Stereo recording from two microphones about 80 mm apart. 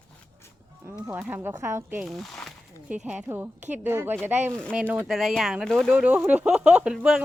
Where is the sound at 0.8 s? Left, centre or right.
Right.